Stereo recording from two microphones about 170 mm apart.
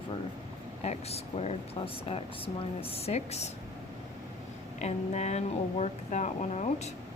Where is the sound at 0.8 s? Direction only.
40° left (ahead or behind).